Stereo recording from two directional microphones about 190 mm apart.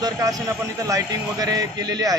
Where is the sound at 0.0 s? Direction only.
20° right (ahead or behind).